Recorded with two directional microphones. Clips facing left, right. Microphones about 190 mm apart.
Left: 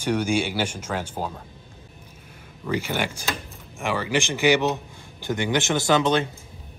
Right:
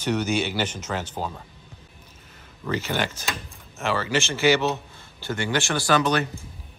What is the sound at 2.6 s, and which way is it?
Speech, 10° left (ahead or behind).